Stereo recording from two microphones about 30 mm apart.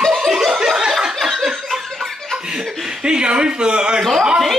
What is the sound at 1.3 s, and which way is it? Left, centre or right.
Laughter, centre.